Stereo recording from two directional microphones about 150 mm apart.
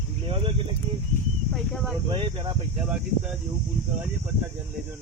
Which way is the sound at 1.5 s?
Centre (ahead or behind).